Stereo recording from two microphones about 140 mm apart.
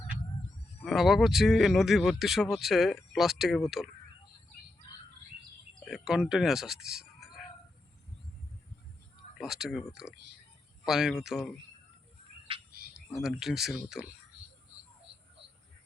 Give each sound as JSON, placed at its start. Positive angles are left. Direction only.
{"t": 0.9, "sound": "speech", "side_deg": 0}
{"t": 5.9, "sound": "speech", "side_deg": -5}
{"t": 9.4, "sound": "speech", "side_deg": 0}
{"t": 12.5, "sound": "bird", "side_deg": -40}
{"t": 13.2, "sound": "speech", "side_deg": -5}